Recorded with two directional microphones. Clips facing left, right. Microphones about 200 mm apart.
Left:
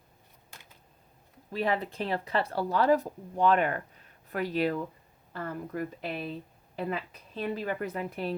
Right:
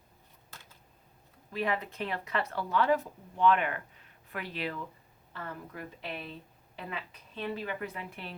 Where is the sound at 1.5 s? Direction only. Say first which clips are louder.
Left 3 dB; 35° left (ahead or behind).